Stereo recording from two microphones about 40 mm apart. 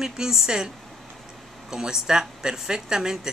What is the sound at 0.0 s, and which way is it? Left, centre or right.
Speech, centre.